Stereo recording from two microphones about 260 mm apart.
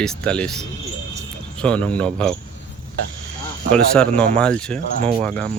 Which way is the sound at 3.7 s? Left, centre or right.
Centre.